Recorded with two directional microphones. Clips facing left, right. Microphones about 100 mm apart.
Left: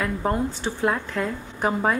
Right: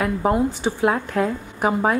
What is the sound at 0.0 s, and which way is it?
A woman's voice, 10° right (ahead or behind).